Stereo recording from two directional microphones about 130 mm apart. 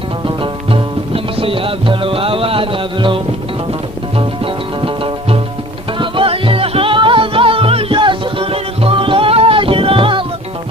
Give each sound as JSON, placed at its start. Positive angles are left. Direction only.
{"t": 0.4, "sound": "music", "side_deg": -40}
{"t": 4.8, "sound": "music", "side_deg": -40}